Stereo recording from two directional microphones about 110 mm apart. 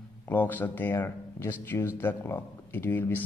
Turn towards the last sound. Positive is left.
turn(degrees=20)  # may be behind; listen again after turning